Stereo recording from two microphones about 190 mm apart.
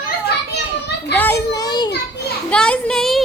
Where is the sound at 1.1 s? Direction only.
10° left (ahead or behind).